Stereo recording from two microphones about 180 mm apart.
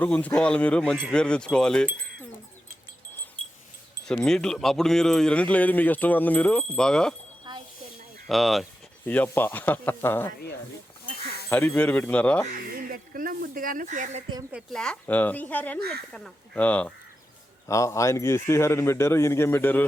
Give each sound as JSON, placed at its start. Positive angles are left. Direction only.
{"t": 0.0, "sound": "speech", "side_deg": 10}
{"t": 4.0, "sound": "speech", "side_deg": 5}
{"t": 7.5, "sound": "a sound", "side_deg": -25}
{"t": 8.3, "sound": "a man's voice", "side_deg": 0}
{"t": 11.4, "sound": "a man's voice", "side_deg": 10}
{"t": 12.7, "sound": "a sound", "side_deg": -55}
{"t": 14.5, "sound": "a man's voice", "side_deg": 5}